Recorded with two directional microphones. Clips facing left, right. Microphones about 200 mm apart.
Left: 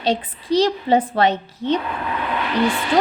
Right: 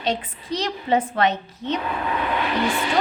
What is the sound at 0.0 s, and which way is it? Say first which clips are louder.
A woman's voice: left 4 dB; 35° left (ahead or behind).